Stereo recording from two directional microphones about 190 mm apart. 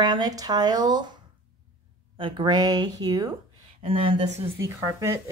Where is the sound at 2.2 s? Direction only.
25° right (ahead or behind).